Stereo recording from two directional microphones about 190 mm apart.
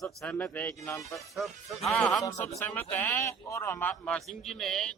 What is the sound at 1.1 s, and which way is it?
A man's voice, centre (ahead or behind).